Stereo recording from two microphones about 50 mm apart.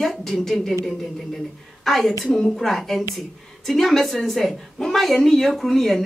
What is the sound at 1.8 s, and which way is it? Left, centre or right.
A woman's voice, centre.